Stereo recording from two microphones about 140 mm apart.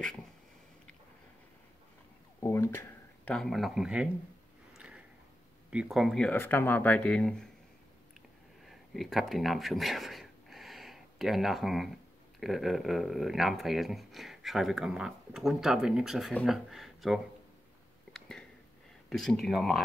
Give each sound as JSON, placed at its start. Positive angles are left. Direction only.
{"t": 2.4, "sound": "a sound", "side_deg": 20}
{"t": 3.3, "sound": "speech", "side_deg": 0}
{"t": 4.7, "sound": "a sound", "side_deg": -5}
{"t": 5.7, "sound": "speech", "side_deg": -5}
{"t": 6.3, "sound": "speech", "side_deg": 15}
{"t": 8.6, "sound": "speech", "side_deg": 0}
{"t": 19.0, "sound": "speech", "side_deg": 0}